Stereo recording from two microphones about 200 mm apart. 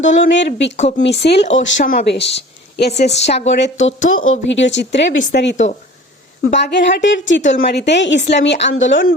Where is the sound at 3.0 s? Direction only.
35° left (ahead or behind).